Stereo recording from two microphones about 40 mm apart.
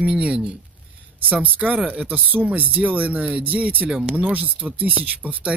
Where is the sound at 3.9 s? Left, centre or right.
Centre.